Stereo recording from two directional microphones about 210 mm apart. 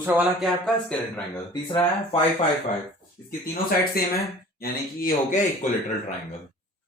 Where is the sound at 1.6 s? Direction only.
25° left (ahead or behind).